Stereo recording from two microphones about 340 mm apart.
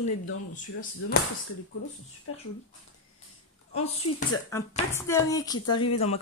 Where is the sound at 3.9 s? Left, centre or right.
Centre.